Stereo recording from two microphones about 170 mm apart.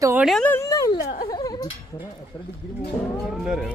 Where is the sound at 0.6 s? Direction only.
20° left (ahead or behind).